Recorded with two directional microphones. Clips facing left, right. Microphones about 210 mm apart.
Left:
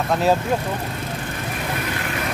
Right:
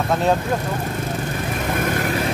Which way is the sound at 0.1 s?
5° left (ahead or behind).